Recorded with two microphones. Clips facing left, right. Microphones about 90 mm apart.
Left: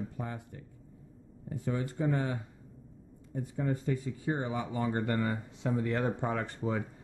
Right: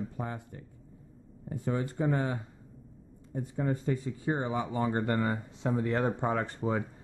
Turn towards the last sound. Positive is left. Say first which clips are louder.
# right 3 dB
turn(degrees=-30)  # may be behind; listen again after turning